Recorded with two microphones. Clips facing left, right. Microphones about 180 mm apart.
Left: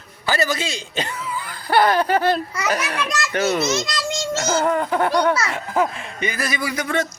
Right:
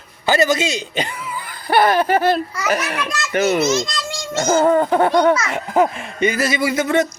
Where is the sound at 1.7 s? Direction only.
10° right (ahead or behind).